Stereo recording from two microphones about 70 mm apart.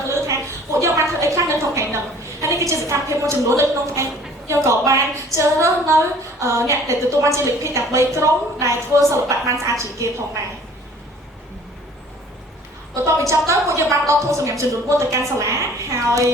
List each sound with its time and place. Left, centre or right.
0.0 s a sound: right
2.8 s a woman's voice: right
13.1 s a woman's voice: right